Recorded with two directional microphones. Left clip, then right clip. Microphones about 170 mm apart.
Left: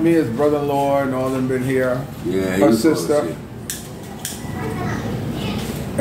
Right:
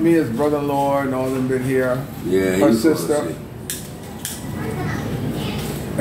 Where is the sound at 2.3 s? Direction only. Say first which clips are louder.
Right 3 dB; 20° right (ahead or behind).